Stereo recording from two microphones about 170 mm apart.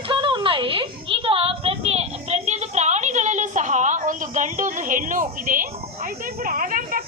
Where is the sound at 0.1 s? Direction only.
30° right (ahead or behind).